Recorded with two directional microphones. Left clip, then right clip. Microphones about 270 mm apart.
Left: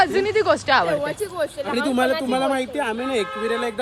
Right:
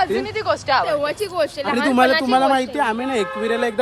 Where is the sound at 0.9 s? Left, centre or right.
Right.